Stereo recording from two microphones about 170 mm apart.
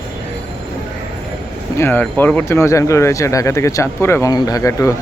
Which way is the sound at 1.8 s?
10° left (ahead or behind).